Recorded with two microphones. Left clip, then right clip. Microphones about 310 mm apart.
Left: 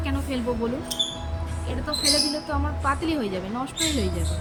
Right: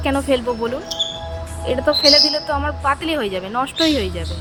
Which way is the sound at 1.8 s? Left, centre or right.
Centre.